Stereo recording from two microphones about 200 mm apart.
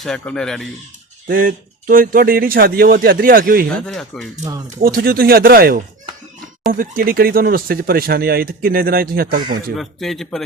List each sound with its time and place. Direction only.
0.0 s speech: 5° left (ahead or behind)
1.3 s speech: 45° right (ahead or behind)
3.8 s speech: 5° left (ahead or behind)
4.8 s speech: 50° right (ahead or behind)
9.7 s speech: centre (ahead or behind)